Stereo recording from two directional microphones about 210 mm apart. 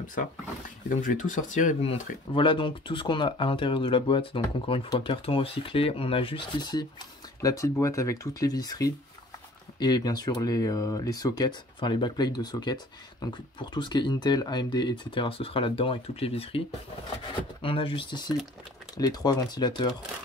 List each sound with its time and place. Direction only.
0.0 s speech: 40° left (ahead or behind); by 19.9 s 20° left (ahead or behind)